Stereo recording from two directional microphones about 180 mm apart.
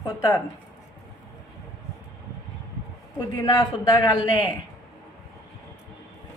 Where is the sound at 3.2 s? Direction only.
20° left (ahead or behind).